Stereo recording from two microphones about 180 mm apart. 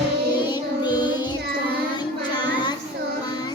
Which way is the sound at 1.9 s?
25° left (ahead or behind).